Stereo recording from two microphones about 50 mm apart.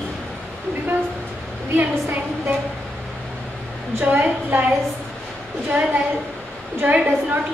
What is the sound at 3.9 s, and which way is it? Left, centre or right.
Speech, right.